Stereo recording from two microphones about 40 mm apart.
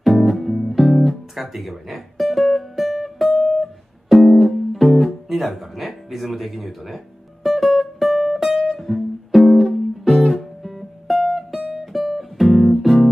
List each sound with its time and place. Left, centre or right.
0.0 s guitar: centre
3.3 s music: centre
3.5 s music: centre